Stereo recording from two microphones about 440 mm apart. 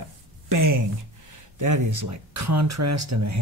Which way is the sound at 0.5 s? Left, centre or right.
Right.